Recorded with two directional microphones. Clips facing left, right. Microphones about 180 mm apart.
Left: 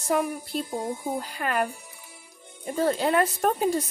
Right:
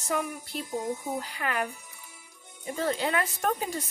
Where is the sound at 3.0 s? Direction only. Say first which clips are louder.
Left 6 dB; 45° left (ahead or behind).